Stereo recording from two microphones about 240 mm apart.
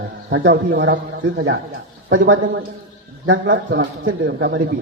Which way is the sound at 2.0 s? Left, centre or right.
Right.